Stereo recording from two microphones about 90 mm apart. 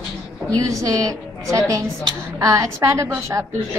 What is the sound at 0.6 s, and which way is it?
A woman's voice, 40° right (ahead or behind).